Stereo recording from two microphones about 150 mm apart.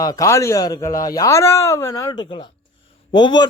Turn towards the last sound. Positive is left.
turn(degrees=30)  # may be behind; listen again after turning